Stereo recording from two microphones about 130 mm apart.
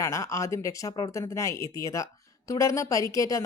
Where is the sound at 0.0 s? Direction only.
25° left (ahead or behind).